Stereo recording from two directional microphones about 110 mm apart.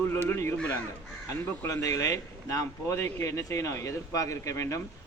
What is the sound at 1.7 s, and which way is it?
Speech, 30° left (ahead or behind).